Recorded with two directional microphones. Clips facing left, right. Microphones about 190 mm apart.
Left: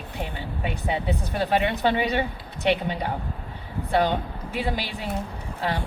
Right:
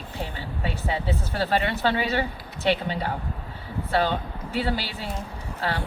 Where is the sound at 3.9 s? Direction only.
15° left (ahead or behind).